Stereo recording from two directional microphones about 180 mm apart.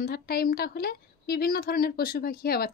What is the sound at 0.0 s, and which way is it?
A woman's voice, 55° left (ahead or behind).